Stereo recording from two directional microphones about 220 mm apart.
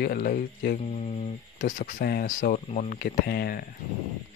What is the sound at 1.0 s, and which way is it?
Speech, 25° left (ahead or behind).